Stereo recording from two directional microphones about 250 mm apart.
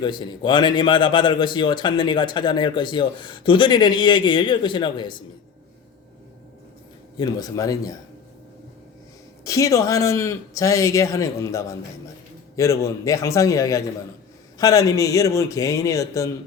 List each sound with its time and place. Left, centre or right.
0.0 s a man's voice: centre
7.2 s a man's voice: centre
9.4 s a man's voice: centre